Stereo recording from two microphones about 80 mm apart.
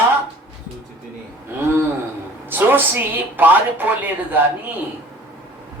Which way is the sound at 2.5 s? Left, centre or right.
Right.